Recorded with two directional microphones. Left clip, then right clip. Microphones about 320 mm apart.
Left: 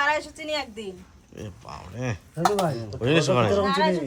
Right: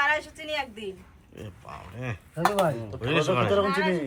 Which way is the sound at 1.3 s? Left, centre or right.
Centre.